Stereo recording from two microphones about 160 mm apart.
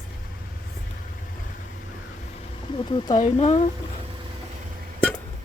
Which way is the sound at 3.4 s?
40° left (ahead or behind).